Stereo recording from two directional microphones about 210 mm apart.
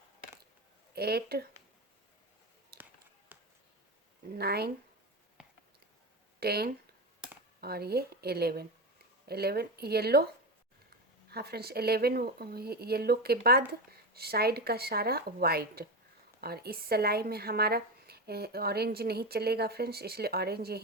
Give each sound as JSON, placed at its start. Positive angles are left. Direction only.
{"t": 0.9, "sound": "speech", "side_deg": -50}
{"t": 2.7, "sound": "basketball bounce", "side_deg": -45}
{"t": 3.3, "sound": "a sound", "side_deg": -10}
{"t": 4.4, "sound": "speech", "side_deg": -50}
{"t": 6.4, "sound": "speech", "side_deg": -50}
{"t": 11.3, "sound": "speech", "side_deg": -50}